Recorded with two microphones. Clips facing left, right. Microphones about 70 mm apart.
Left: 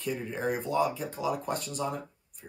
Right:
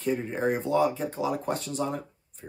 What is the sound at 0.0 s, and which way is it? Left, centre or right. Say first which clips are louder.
Speech: right 5 dB; right.